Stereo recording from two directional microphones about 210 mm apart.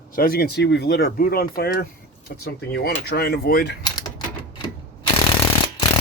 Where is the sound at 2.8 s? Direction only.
50° left (ahead or behind).